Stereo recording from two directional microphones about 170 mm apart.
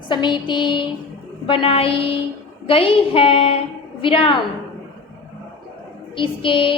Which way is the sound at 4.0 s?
30° left (ahead or behind).